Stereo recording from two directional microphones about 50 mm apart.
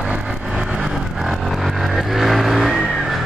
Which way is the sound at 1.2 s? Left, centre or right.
Centre.